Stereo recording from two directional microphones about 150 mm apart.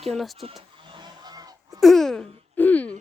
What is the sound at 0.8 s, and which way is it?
Honk, 30° right (ahead or behind).